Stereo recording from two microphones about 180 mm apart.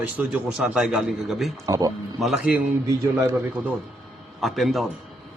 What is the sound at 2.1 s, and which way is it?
Speech, centre (ahead or behind).